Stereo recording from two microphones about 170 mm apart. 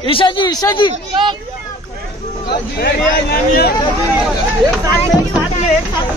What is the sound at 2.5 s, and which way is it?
A man's voice, 70° left (ahead or behind).